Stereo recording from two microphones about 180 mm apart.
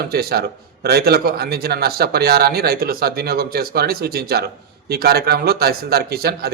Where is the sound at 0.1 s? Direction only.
60° right (ahead or behind).